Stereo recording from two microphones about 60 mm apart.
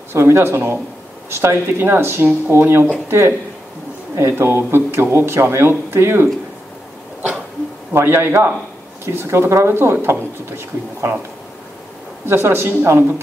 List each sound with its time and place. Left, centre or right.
0.1 s speech: right
7.9 s speech: right
12.3 s speech: right